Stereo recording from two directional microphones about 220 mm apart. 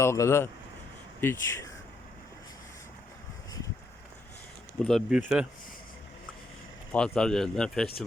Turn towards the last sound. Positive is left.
turn(degrees=5)  # may be behind; listen again after turning